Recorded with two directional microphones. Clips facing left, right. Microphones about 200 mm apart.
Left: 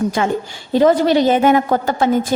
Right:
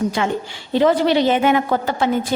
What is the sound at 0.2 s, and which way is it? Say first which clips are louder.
A woman's voice: left 3 dB; 45° left (ahead or behind).